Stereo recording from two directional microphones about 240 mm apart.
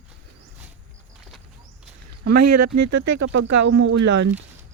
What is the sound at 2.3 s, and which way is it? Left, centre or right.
Speech, right.